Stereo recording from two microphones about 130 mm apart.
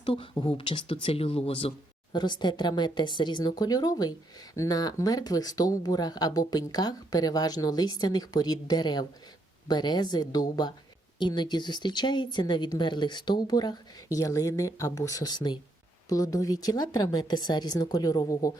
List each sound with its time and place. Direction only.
0.0 s speech: 40° left (ahead or behind)
2.1 s a woman's voice: 35° left (ahead or behind)